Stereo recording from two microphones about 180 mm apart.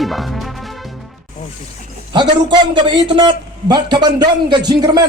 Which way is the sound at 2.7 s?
25° right (ahead or behind).